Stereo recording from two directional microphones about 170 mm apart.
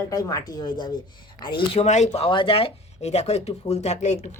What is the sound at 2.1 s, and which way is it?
Speech, 30° left (ahead or behind).